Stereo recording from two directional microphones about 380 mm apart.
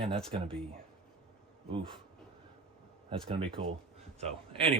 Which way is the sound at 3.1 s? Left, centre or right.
Centre.